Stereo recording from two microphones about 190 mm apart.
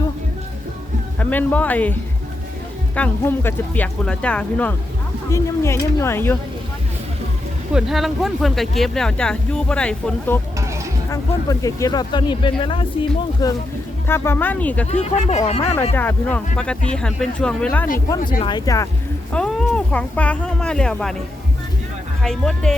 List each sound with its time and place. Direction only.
1.2 s speech: 10° left (ahead or behind)
7.7 s speech: 5° right (ahead or behind)
14.8 s speech: 35° left (ahead or behind)
16.0 s speech: 10° left (ahead or behind)
18.2 s speech: 45° left (ahead or behind)
18.4 s speech: 20° left (ahead or behind)
19.3 s speech: 5° left (ahead or behind)
22.2 s speech: centre (ahead or behind)